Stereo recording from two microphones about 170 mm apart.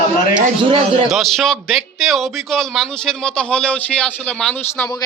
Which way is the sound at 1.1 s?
Centre (ahead or behind).